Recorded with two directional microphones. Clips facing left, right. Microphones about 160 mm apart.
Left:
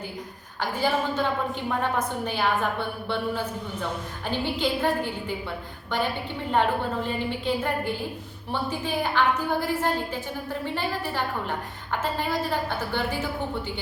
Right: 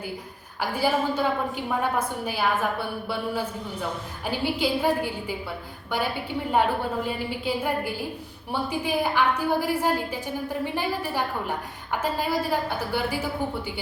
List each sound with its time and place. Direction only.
0.6 s a woman's voice: 10° right (ahead or behind)
6.5 s a woman's voice: 10° right (ahead or behind)